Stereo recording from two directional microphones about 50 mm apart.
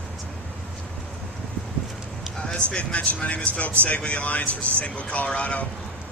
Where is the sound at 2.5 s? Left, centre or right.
Left.